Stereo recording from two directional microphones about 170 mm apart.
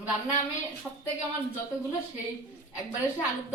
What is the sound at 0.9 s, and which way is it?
Speech, 5° left (ahead or behind).